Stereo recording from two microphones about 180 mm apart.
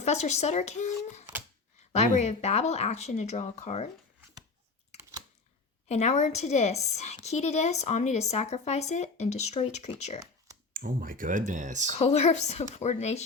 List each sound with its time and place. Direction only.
0.0 s a woman's voice: 40° left (ahead or behind)
5.9 s a woman's voice: 40° left (ahead or behind)
10.8 s speech: 50° right (ahead or behind)
11.9 s a woman's voice: 35° left (ahead or behind)